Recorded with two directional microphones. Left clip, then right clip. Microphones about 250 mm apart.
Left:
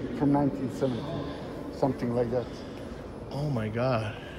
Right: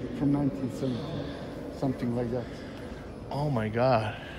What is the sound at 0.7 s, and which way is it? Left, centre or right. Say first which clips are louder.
Speech: left 3 dB; centre.